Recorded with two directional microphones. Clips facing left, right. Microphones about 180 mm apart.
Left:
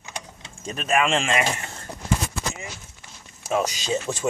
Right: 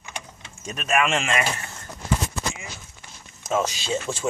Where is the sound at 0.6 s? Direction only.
30° left (ahead or behind).